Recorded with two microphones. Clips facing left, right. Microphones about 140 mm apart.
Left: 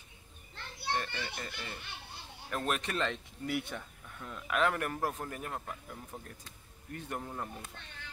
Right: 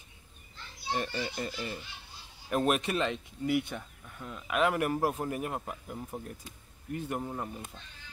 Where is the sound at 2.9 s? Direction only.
5° right (ahead or behind).